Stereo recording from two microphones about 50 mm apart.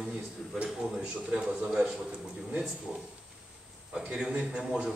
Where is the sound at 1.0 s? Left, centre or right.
Centre.